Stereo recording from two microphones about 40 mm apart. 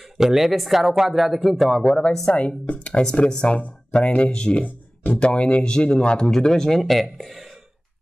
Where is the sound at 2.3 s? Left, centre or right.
Left.